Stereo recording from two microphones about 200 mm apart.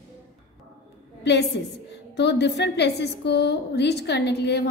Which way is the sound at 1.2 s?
60° left (ahead or behind).